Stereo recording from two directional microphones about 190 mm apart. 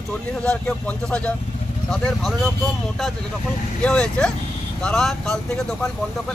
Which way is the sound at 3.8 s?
5° left (ahead or behind).